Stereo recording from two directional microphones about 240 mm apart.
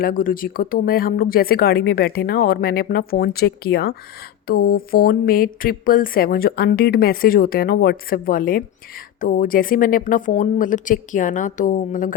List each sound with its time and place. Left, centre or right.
0.0 s a woman's voice: left